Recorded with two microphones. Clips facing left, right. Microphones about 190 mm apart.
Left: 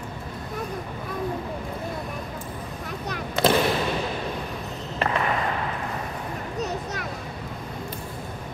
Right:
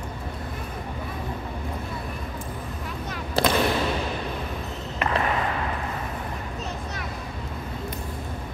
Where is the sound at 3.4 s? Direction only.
35° right (ahead or behind).